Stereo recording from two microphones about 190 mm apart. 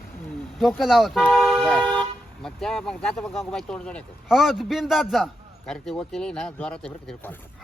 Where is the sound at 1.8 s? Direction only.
20° right (ahead or behind).